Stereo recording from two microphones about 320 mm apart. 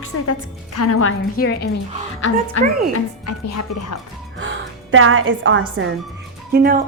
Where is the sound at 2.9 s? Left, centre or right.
Left.